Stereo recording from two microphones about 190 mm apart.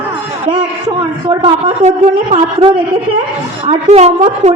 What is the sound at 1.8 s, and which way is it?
A woman's voice, 35° right (ahead or behind).